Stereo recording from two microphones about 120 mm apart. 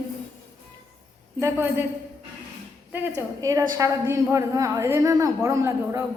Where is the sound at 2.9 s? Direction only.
25° right (ahead or behind).